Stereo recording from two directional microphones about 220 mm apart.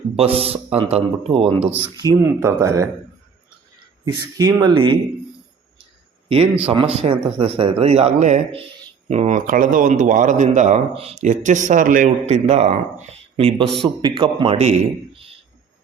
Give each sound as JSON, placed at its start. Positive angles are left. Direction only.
{"t": 0.2, "sound": "speech", "side_deg": -25}
{"t": 2.0, "sound": "speech", "side_deg": -15}
{"t": 4.0, "sound": "speech", "side_deg": -15}
{"t": 6.2, "sound": "a man's voice", "side_deg": -25}